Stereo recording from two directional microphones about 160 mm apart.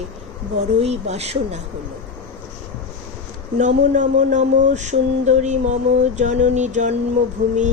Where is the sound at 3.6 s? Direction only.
50° right (ahead or behind).